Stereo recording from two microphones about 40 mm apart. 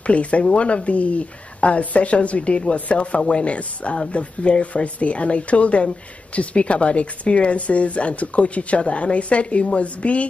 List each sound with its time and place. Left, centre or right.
0.0 s speech: left